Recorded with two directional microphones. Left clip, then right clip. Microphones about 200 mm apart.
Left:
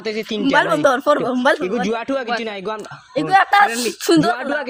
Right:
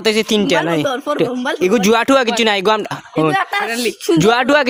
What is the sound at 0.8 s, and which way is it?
Speech, 45° left (ahead or behind).